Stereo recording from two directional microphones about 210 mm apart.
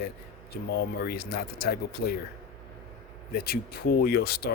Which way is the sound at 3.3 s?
45° left (ahead or behind).